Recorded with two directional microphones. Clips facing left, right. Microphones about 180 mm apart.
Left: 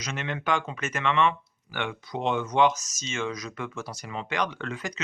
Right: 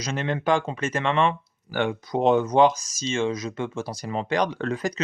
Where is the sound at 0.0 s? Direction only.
35° right (ahead or behind).